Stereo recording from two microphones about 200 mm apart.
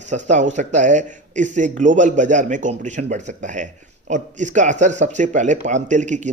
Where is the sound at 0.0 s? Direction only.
35° right (ahead or behind).